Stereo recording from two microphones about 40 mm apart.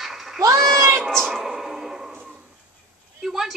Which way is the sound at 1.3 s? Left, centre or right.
Centre.